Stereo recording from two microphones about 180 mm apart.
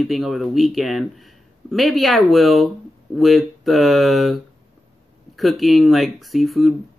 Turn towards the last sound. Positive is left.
turn(degrees=0)  # may be behind; listen again after turning